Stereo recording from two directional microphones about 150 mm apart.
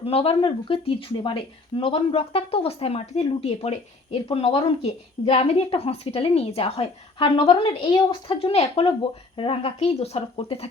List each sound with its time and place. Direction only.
0.0 s speech: 40° left (ahead or behind)